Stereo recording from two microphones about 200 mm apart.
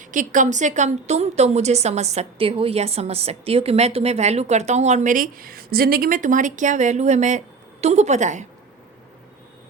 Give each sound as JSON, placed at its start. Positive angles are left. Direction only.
{"t": 0.0, "sound": "a woman's voice", "side_deg": -40}